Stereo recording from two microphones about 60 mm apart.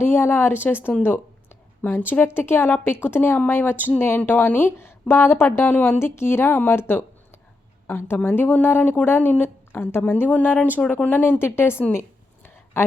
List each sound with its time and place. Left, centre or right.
0.0 s speech: left
11.2 s a woman's voice: left